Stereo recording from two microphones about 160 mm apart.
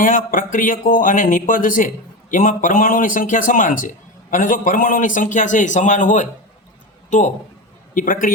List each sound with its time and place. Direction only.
0.0 s a man's voice: 60° left (ahead or behind)